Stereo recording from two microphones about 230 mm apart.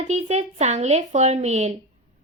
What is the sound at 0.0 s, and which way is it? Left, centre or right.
A woman's voice, right.